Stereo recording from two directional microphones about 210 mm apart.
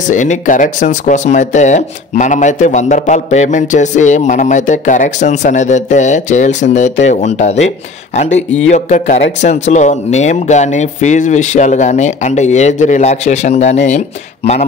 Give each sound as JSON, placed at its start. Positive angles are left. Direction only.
{"t": 0.1, "sound": "speech", "side_deg": 35}